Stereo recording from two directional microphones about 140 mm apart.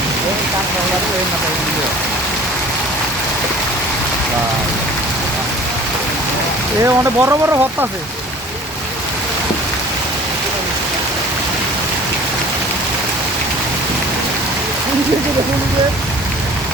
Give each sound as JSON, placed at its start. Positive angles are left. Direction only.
{"t": 6.8, "sound": "speech", "side_deg": -20}